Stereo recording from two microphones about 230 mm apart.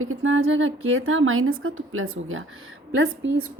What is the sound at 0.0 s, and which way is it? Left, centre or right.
A woman's voice, right.